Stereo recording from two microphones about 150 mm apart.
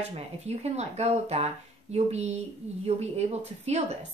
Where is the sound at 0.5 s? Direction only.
45° right (ahead or behind).